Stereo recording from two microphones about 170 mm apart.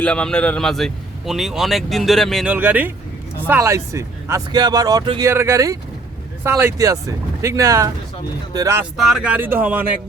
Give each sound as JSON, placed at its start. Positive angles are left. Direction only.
{"t": 0.0, "sound": "speech", "side_deg": 5}
{"t": 8.8, "sound": "speech", "side_deg": 0}